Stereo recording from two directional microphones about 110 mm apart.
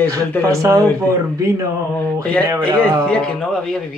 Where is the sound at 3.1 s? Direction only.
5° left (ahead or behind).